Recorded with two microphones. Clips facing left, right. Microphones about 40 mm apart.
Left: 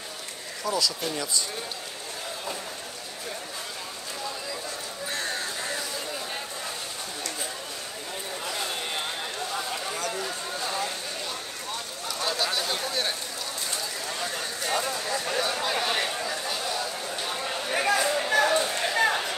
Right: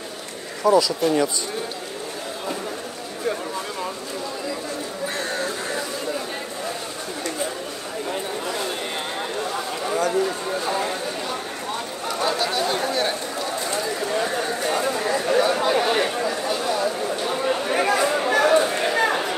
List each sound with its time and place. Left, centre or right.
0.7 s speech: right
5.1 s a sound: centre
9.8 s speech: right
12.1 s speech: centre
13.7 s speech: right
17.2 s a sound: right